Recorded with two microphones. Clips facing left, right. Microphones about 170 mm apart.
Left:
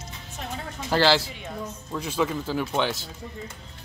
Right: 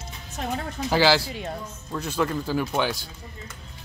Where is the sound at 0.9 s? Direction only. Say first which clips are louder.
Right 1 dB; 5° right (ahead or behind).